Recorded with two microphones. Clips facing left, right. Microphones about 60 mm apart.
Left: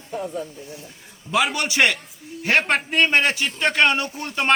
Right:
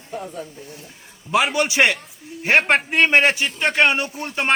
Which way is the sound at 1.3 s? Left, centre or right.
Right.